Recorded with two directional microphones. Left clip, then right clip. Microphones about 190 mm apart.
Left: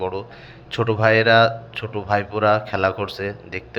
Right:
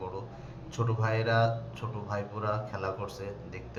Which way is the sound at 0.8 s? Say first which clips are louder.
Left 15 dB; 30° left (ahead or behind).